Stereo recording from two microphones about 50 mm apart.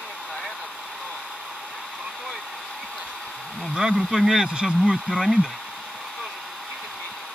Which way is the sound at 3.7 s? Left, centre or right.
Centre.